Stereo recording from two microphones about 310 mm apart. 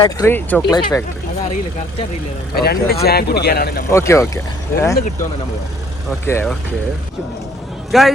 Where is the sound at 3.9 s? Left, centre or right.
Centre.